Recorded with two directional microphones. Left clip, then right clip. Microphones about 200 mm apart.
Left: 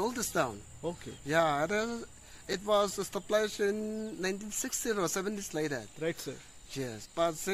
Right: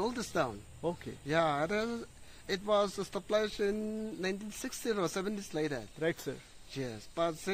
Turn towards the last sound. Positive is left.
turn(degrees=-5)  # may be behind; listen again after turning